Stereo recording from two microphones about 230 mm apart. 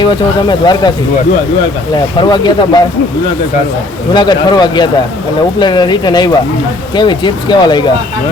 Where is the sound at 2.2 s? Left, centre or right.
Centre.